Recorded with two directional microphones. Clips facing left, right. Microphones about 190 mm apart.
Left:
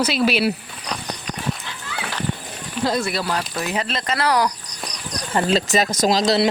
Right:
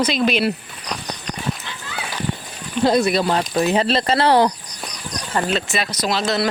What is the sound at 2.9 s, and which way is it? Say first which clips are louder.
Speech: right 6 dB; 20° right (ahead or behind).